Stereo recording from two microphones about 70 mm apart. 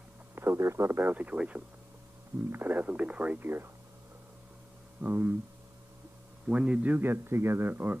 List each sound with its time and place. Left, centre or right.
0.4 s a man's voice: right
5.0 s a man's voice: right
6.4 s a man's voice: centre